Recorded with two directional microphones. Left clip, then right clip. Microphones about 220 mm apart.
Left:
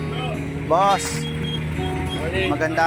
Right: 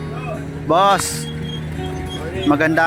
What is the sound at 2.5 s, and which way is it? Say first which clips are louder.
Speech: right 8 dB; 55° right (ahead or behind).